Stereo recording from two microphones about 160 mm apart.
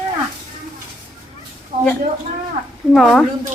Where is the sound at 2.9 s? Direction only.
Centre (ahead or behind).